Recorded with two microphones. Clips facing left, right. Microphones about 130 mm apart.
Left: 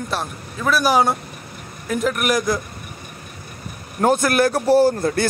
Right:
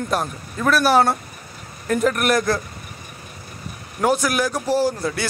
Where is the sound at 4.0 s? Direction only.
50° left (ahead or behind).